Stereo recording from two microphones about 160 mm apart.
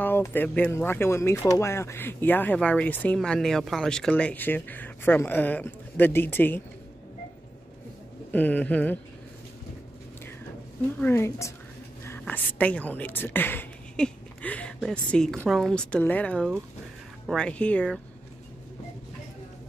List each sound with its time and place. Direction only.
0.0 s speech: 15° left (ahead or behind)
8.3 s speech: 10° left (ahead or behind)
11.0 s a woman's voice: 15° left (ahead or behind)